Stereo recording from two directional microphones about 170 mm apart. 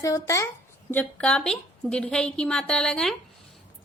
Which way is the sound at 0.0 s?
20° left (ahead or behind).